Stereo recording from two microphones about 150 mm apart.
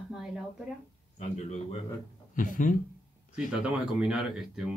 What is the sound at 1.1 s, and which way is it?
Speech, 50° left (ahead or behind).